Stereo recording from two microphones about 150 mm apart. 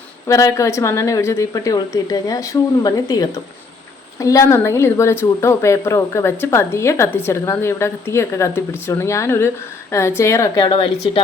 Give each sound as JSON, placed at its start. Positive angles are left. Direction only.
{"t": 0.3, "sound": "a woman's voice", "side_deg": 20}
{"t": 10.6, "sound": "speech", "side_deg": 35}